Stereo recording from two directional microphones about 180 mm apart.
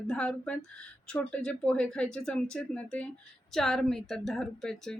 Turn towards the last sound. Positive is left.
turn(degrees=5)  # may be behind; listen again after turning